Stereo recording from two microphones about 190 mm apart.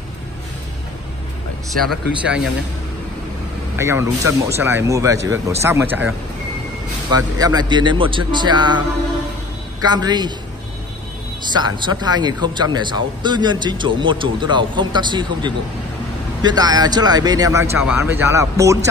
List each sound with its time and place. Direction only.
1.8 s a man's voice: centre (ahead or behind)
3.7 s speech: 15° right (ahead or behind)
7.1 s speech: 20° right (ahead or behind)
11.5 s speech: 25° right (ahead or behind)